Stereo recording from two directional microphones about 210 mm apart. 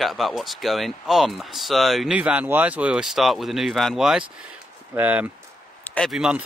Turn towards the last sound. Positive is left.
turn(degrees=-5)  # may be behind; listen again after turning